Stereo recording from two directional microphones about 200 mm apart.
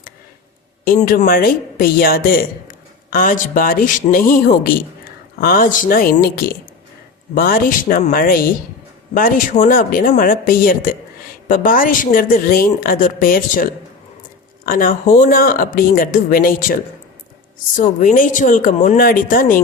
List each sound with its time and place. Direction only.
0.9 s speech: 45° left (ahead or behind)
17.7 s speech: 40° left (ahead or behind)